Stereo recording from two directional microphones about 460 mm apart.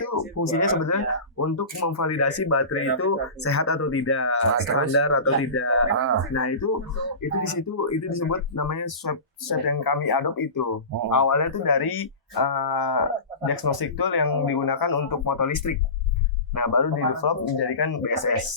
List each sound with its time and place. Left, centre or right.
0.0 s speech: left